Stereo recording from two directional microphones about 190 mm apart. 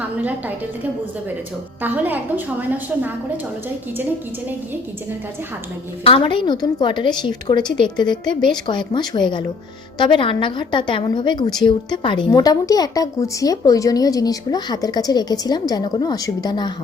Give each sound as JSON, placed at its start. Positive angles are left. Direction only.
{"t": 0.2, "sound": "a woman's voice", "side_deg": -10}
{"t": 1.8, "sound": "a woman's voice", "side_deg": -10}
{"t": 6.1, "sound": "a woman's voice", "side_deg": 25}